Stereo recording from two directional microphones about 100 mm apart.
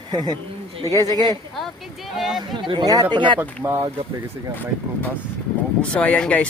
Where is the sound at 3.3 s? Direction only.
25° right (ahead or behind).